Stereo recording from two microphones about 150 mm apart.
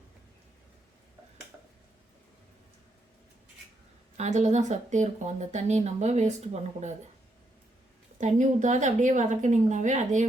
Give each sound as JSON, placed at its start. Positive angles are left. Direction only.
{"t": 4.2, "sound": "speech", "side_deg": -50}
{"t": 8.2, "sound": "speech", "side_deg": -55}